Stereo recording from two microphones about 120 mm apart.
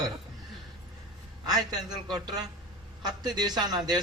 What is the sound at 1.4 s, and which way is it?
Speech, 35° right (ahead or behind).